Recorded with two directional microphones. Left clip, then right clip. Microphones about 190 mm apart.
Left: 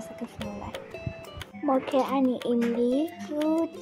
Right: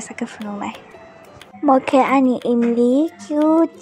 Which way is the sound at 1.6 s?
30° right (ahead or behind).